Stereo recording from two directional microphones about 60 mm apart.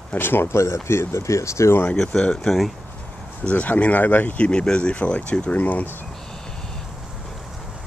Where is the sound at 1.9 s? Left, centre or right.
Centre.